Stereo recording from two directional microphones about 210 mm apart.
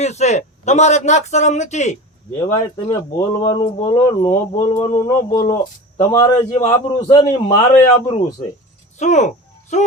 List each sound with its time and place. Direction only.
0.0 s a man's voice: 30° left (ahead or behind)
2.5 s a man's voice: 15° left (ahead or behind)
4.9 s a man's voice: 30° left (ahead or behind)
6.1 s a man's voice: 15° left (ahead or behind); by 9.8 s 35° left (ahead or behind)